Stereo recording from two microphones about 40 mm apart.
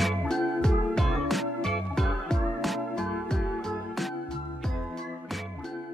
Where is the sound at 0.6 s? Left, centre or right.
Centre.